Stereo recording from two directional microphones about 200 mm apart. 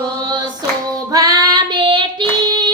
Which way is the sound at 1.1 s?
20° right (ahead or behind).